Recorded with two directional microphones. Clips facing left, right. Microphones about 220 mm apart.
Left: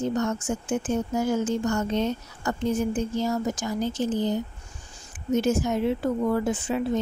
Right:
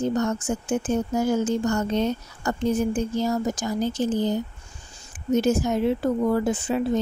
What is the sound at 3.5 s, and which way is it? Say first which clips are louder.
Speech: right 2 dB; 35° right (ahead or behind).